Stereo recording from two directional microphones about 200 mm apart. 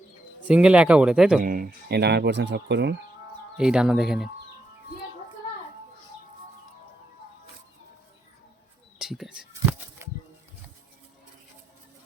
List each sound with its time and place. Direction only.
0.4 s speech: 5° right (ahead or behind)
1.4 s speech: 45° right (ahead or behind)
3.6 s speech: 5° right (ahead or behind)
9.0 s a sound: centre (ahead or behind)